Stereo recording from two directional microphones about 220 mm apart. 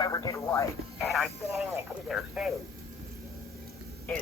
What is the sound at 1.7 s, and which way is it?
Speech, centre (ahead or behind).